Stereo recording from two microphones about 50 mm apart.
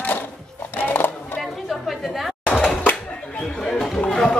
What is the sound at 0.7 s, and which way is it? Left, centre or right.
Music, left.